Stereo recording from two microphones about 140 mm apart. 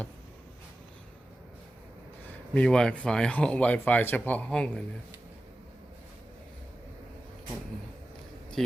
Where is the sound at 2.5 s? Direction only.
5° left (ahead or behind).